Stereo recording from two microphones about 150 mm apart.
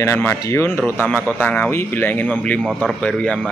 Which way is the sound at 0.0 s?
15° left (ahead or behind).